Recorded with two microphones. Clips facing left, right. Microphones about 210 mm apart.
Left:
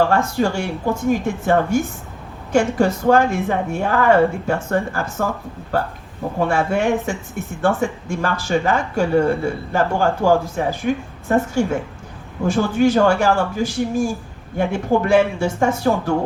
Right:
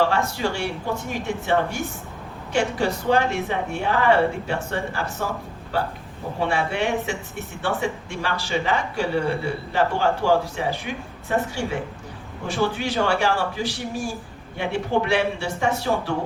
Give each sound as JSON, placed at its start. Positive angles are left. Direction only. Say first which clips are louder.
{"t": 0.1, "sound": "speech", "louder": "left 5 dB", "side_deg": 45}